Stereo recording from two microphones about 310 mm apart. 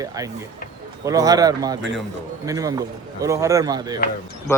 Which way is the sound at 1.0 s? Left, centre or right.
Centre.